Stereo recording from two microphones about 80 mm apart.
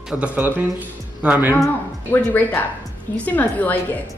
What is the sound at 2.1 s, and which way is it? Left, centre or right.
A woman's voice, left.